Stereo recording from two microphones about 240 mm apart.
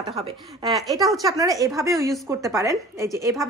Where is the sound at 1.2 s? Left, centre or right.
Centre.